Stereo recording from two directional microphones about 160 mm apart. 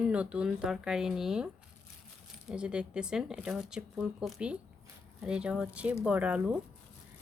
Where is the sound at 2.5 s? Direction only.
5° right (ahead or behind).